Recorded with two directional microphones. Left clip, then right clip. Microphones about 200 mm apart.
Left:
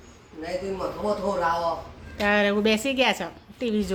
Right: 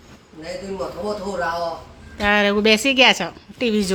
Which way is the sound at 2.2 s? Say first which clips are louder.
Right 5 dB; 20° right (ahead or behind).